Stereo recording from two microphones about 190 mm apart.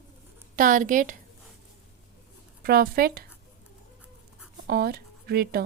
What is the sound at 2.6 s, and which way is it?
Speech, 50° right (ahead or behind).